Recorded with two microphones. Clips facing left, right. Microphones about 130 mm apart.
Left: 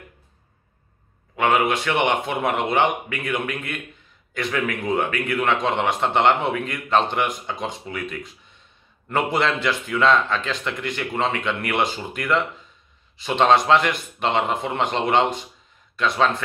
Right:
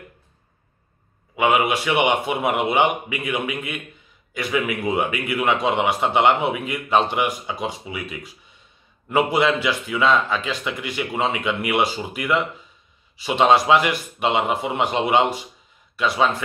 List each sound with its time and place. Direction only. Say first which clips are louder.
1.3 s a man's voice: right 1 dB; 10° right (ahead or behind)